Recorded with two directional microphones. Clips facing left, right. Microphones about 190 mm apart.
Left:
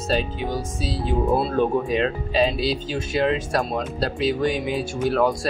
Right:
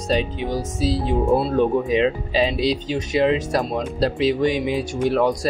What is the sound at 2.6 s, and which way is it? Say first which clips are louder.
Speech: right 3 dB; 20° right (ahead or behind).